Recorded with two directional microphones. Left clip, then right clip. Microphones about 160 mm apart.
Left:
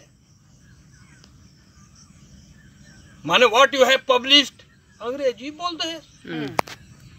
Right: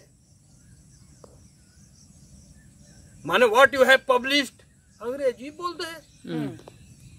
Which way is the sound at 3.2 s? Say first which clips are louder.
Left 2 dB; 25° right (ahead or behind).